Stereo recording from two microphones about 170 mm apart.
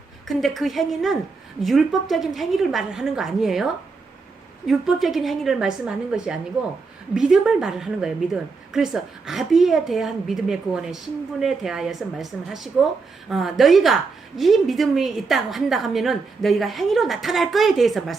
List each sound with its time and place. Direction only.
0.3 s a woman's voice: centre (ahead or behind)